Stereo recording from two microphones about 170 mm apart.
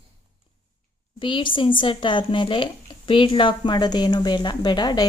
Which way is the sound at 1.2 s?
30° left (ahead or behind).